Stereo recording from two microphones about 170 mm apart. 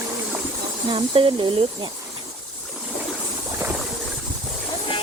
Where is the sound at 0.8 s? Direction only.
30° right (ahead or behind).